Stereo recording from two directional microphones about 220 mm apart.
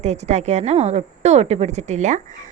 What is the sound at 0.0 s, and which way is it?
A woman's voice, 30° right (ahead or behind).